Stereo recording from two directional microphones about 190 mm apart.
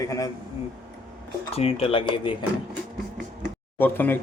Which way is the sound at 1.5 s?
30° left (ahead or behind).